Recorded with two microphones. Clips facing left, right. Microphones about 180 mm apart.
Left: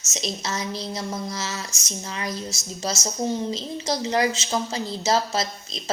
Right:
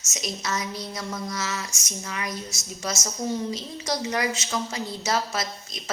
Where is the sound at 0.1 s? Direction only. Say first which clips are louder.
Left 1 dB; 25° left (ahead or behind).